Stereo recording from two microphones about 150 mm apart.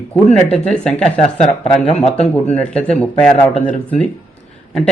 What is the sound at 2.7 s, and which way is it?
Speech, 5° left (ahead or behind).